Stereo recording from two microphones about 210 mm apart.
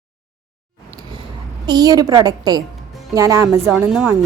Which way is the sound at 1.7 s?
20° right (ahead or behind).